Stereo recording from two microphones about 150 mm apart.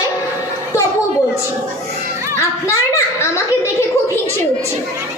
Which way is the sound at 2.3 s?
20° left (ahead or behind).